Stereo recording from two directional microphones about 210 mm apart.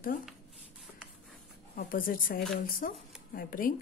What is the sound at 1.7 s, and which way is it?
A woman's voice, 40° left (ahead or behind).